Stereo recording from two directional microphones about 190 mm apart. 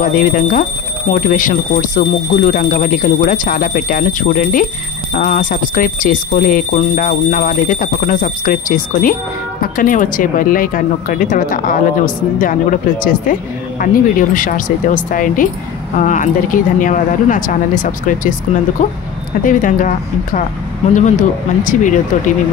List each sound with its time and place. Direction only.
0.0 s speech: 45° left (ahead or behind)